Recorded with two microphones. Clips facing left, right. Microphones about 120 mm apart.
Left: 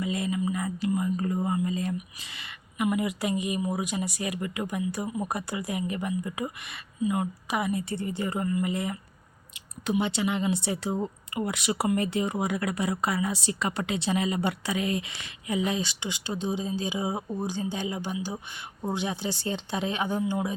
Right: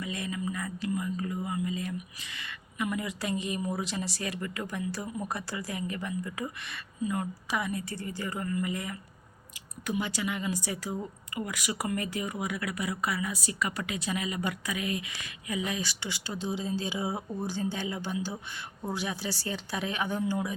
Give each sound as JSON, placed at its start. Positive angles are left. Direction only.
{"t": 0.0, "sound": "speech", "side_deg": 25}
{"t": 1.1, "sound": "speech", "side_deg": 40}
{"t": 2.4, "sound": "a woman's voice", "side_deg": 20}